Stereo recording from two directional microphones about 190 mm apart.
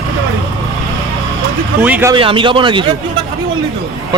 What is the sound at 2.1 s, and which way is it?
Speech, 25° right (ahead or behind).